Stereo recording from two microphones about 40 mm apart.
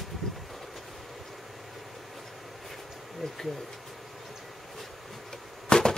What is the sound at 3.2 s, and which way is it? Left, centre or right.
Bee, centre.